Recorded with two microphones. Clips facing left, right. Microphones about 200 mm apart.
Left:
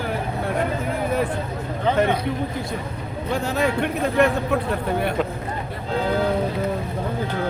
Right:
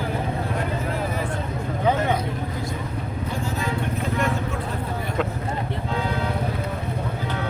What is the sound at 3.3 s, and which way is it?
Vehicle, 70° left (ahead or behind).